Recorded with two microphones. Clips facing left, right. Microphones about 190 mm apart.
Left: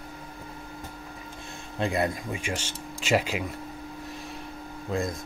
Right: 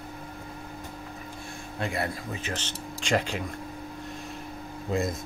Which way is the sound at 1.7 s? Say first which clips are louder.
Left 4 dB; 20° left (ahead or behind).